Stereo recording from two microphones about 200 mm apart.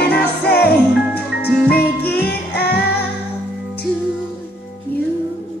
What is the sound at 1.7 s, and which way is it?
Music, 50° left (ahead or behind).